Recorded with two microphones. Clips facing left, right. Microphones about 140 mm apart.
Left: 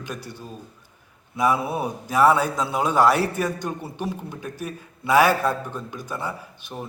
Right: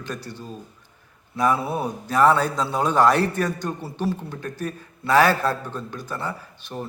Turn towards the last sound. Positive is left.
turn(degrees=10)  # may be behind; listen again after turning